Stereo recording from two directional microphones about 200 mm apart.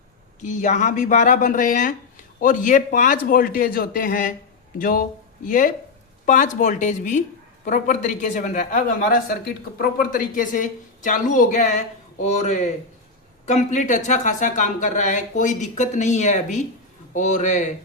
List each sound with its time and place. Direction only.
0.4 s a man's voice: 40° left (ahead or behind)